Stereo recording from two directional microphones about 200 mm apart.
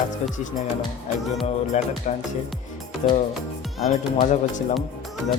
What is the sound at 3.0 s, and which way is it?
A man's voice, 35° left (ahead or behind).